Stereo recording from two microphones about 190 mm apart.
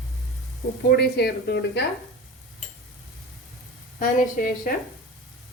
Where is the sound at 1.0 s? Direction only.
60° left (ahead or behind).